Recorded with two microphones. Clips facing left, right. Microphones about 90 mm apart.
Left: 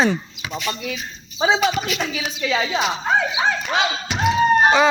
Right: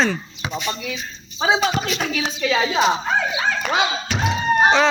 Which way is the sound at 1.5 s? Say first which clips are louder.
Left 1 dB; 30° right (ahead or behind).